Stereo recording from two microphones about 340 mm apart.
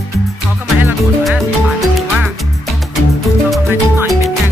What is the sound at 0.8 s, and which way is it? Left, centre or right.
Music, centre.